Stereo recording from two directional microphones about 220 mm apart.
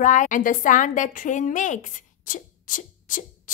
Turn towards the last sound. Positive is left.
turn(degrees=35)  # may be behind; listen again after turning